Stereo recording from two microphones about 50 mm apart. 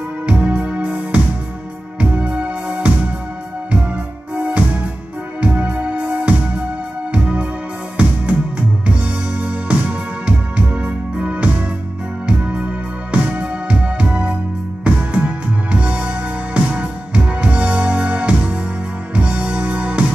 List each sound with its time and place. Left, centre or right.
0.3 s music: right
3.9 s music: right